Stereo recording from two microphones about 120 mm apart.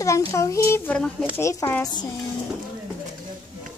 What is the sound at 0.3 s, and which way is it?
Speech, 25° left (ahead or behind).